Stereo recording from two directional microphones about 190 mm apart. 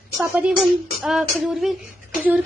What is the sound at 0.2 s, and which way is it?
A woman's voice, centre (ahead or behind).